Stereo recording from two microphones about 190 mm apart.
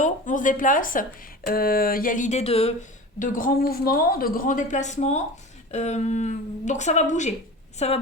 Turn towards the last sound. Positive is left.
turn(degrees=35)  # may be behind; listen again after turning